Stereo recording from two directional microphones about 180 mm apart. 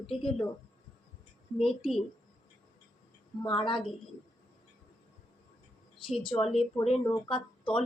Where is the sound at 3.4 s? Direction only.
30° left (ahead or behind).